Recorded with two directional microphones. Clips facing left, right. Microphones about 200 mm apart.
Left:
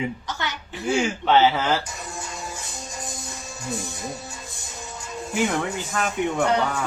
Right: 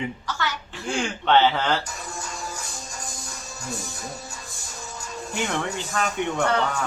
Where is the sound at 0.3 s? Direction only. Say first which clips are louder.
Right 1 dB; 20° left (ahead or behind).